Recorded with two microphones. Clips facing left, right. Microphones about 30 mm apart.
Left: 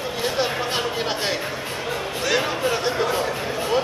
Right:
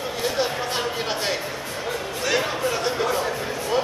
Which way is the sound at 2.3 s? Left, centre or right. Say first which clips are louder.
Left 1 dB; centre.